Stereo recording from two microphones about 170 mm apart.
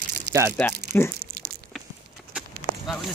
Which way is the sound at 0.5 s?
10° left (ahead or behind).